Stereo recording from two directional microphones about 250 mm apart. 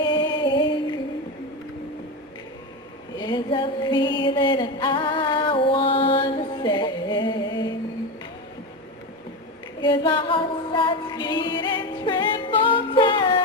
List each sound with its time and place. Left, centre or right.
0.0 s a sound: centre
3.2 s music: centre
9.8 s music: centre